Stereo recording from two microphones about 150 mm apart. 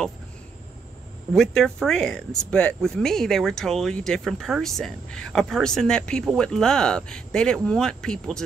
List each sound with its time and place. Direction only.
1.3 s speech: 5° left (ahead or behind)